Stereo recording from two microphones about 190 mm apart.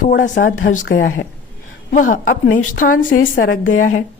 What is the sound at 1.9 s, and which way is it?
A woman's voice, 45° left (ahead or behind).